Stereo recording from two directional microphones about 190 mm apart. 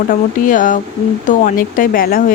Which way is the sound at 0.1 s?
45° left (ahead or behind).